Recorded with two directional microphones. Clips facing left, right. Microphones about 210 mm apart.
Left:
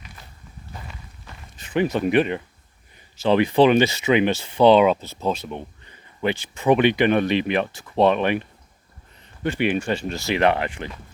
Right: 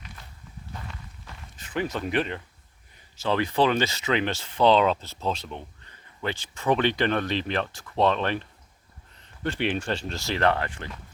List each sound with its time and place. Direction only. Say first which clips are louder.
0.7 s walk: left 1 dB; 10° left (ahead or behind)
3.2 s speech: left 7 dB; 20° left (ahead or behind)